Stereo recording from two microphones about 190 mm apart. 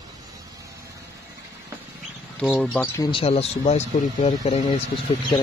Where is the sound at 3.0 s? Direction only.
30° left (ahead or behind).